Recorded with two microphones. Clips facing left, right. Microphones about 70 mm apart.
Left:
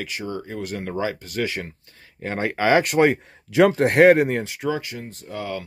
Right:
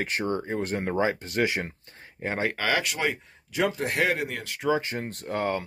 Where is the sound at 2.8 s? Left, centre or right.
Left.